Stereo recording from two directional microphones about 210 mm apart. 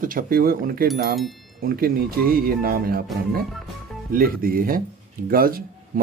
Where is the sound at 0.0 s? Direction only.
40° right (ahead or behind).